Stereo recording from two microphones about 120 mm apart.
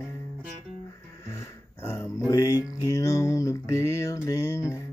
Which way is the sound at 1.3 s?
25° left (ahead or behind).